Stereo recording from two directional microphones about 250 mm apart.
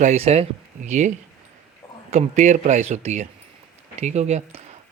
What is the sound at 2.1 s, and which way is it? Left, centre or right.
Speech, right.